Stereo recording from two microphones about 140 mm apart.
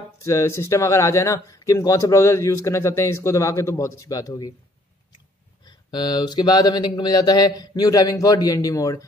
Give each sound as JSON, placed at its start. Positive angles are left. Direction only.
{"t": 0.2, "sound": "speech", "side_deg": 20}
{"t": 5.7, "sound": "speech", "side_deg": 35}